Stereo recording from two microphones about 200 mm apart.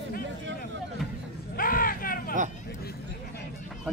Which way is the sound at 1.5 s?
45° left (ahead or behind).